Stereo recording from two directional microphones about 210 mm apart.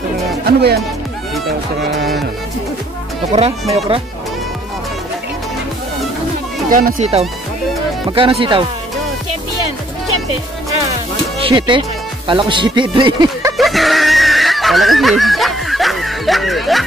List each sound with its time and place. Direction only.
0.5 s speech: 50° right (ahead or behind)
6.7 s speech: 40° right (ahead or behind)
8.1 s speech: 25° right (ahead or behind)
11.4 s speech: 25° right (ahead or behind)
13.6 s a sound: centre (ahead or behind)